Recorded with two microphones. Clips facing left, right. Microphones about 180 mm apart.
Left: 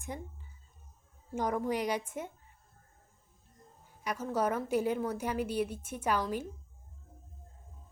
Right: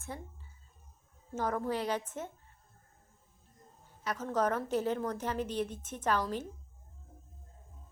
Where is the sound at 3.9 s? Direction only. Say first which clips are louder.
Left 1 dB; 10° left (ahead or behind).